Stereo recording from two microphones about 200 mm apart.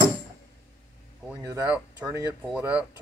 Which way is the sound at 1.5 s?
15° right (ahead or behind).